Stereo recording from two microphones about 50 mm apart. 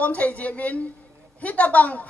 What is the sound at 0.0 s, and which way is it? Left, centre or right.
A woman's voice, left.